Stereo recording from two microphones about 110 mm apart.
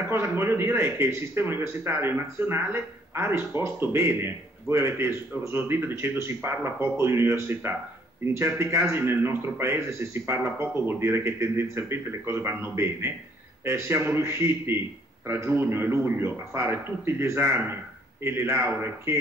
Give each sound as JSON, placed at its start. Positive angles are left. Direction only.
{"t": 0.1, "sound": "speech", "side_deg": -20}